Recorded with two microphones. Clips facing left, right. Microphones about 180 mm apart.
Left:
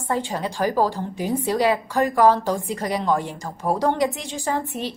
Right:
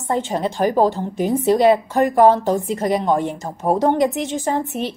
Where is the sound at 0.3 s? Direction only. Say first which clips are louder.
Right 5 dB; 20° right (ahead or behind).